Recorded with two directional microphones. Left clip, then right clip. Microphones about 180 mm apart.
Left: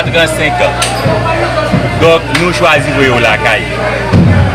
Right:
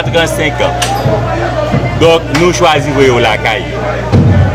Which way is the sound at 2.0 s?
15° right (ahead or behind).